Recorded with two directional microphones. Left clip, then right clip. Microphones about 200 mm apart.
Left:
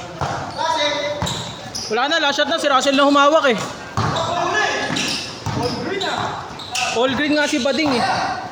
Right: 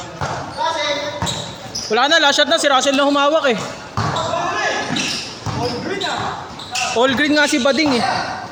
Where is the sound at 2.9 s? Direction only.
20° left (ahead or behind).